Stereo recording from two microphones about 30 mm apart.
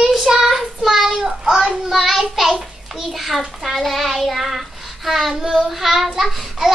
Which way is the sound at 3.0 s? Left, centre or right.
Centre.